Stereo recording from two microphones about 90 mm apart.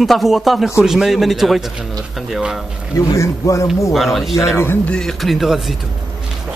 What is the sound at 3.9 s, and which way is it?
Speech, centre (ahead or behind).